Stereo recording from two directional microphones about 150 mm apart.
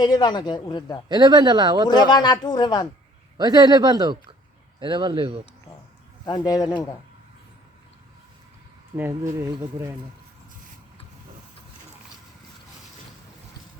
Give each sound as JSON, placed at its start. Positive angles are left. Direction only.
{"t": 0.0, "sound": "speech", "side_deg": 30}
{"t": 1.0, "sound": "a man's voice", "side_deg": -30}
{"t": 1.9, "sound": "speech", "side_deg": 30}
{"t": 3.3, "sound": "a man's voice", "side_deg": -30}
{"t": 6.2, "sound": "speech", "side_deg": 25}
{"t": 9.0, "sound": "a man's voice", "side_deg": -15}